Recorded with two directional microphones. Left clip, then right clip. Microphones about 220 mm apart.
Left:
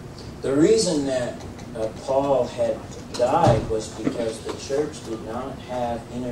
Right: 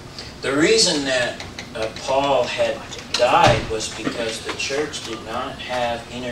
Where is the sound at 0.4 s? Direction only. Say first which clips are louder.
Right 2 dB; 15° right (ahead or behind).